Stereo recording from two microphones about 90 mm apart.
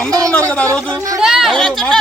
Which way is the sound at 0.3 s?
15° left (ahead or behind).